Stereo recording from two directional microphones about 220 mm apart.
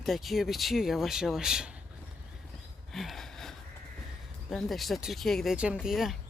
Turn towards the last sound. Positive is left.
turn(degrees=0)  # may be behind; listen again after turning